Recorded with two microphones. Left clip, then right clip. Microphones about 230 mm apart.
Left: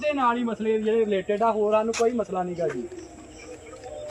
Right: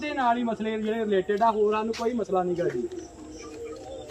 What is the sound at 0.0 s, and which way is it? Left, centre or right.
Speech, centre.